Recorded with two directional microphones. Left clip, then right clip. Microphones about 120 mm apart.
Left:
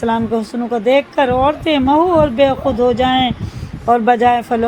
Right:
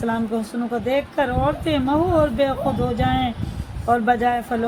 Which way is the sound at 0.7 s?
40° left (ahead or behind).